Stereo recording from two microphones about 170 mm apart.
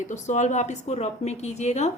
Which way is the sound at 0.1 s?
45° left (ahead or behind).